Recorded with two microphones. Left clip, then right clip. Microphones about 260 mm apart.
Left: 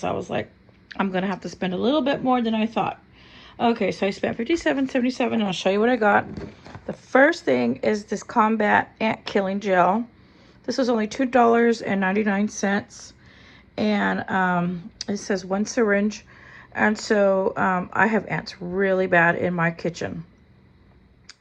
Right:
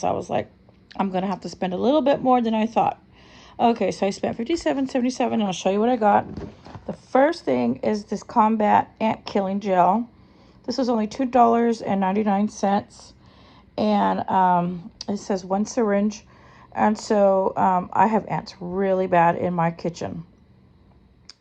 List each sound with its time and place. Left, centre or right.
0.0 s a woman's voice: centre
6.3 s speech: right
6.8 s speech: centre